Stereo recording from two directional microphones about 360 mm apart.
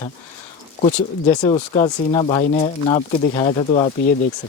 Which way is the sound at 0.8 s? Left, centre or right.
Centre.